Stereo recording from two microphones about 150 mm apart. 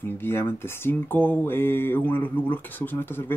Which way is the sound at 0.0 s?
15° left (ahead or behind).